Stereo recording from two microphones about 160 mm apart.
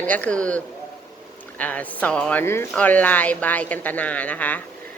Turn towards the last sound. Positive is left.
turn(degrees=10)  # may be behind; listen again after turning